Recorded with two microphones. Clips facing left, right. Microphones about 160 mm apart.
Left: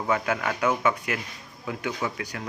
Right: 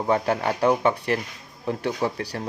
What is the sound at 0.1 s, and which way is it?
Speech, 30° right (ahead or behind).